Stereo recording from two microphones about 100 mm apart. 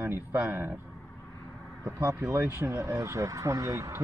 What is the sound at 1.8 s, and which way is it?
Speech, 30° right (ahead or behind).